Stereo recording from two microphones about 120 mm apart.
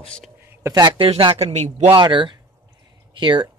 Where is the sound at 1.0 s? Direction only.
50° right (ahead or behind).